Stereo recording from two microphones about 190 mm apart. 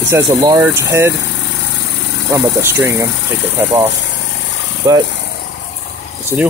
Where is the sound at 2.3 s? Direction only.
15° right (ahead or behind).